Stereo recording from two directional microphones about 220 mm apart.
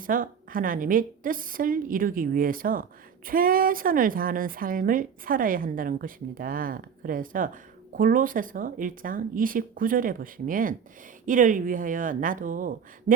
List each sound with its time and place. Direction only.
0.0 s a woman's voice: 40° right (ahead or behind)